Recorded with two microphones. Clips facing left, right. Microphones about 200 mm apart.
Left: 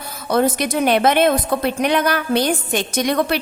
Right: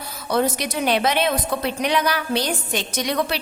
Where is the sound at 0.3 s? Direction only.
50° left (ahead or behind).